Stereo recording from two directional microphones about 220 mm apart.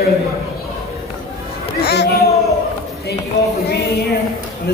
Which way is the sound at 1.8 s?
45° left (ahead or behind).